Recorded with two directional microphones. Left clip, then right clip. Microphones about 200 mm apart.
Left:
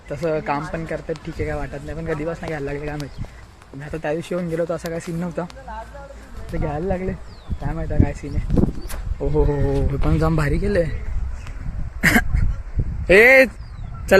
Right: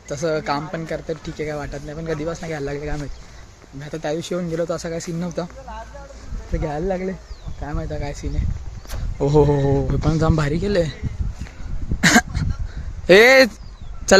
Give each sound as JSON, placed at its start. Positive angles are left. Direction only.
{"t": 0.1, "sound": "speech", "side_deg": -10}
{"t": 6.5, "sound": "speech", "side_deg": -10}
{"t": 9.4, "sound": "speech", "side_deg": -25}
{"t": 9.9, "sound": "speech", "side_deg": -5}
{"t": 11.9, "sound": "cough", "side_deg": -20}
{"t": 13.1, "sound": "speech", "side_deg": -25}